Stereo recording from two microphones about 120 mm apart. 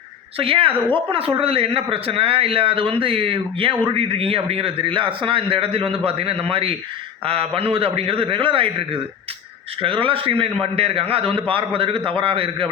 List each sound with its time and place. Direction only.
0.3 s a man's voice: 50° right (ahead or behind)